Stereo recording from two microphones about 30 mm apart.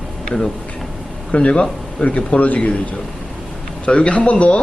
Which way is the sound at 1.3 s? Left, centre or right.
Left.